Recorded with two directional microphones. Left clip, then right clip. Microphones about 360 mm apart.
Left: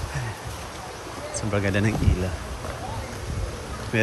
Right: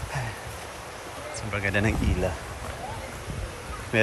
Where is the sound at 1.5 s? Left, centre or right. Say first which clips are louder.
Left 1 dB; centre.